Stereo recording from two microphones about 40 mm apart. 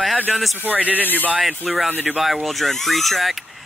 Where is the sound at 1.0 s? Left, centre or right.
Left.